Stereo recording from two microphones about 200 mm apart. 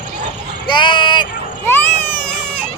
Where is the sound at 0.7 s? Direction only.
25° left (ahead or behind).